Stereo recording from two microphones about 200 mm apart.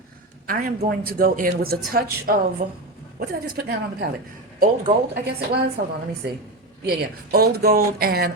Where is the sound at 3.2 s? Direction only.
55° right (ahead or behind).